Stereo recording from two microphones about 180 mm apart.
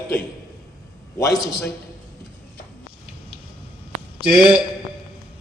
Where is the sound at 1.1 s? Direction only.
20° left (ahead or behind).